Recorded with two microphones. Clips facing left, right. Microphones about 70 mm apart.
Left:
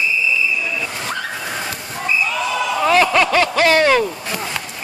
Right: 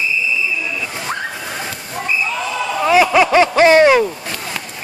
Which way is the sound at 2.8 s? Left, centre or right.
Centre.